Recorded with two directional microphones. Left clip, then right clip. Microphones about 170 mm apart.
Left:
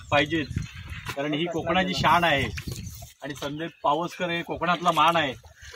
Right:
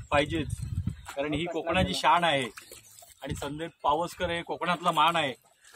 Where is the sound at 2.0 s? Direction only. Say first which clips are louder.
Left 3 dB; 20° right (ahead or behind).